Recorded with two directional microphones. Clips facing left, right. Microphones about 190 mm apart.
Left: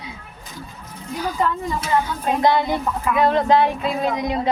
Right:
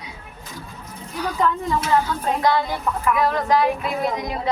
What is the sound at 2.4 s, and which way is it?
Speech, 20° left (ahead or behind).